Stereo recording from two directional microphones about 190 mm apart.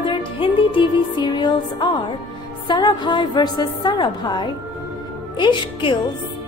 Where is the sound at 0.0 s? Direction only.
25° left (ahead or behind).